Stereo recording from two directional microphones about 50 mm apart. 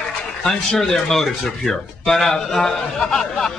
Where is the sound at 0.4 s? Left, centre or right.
Centre.